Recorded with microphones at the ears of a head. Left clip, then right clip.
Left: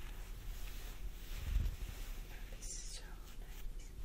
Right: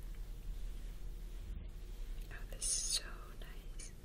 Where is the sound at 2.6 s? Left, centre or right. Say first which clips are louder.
Right 13 dB; right.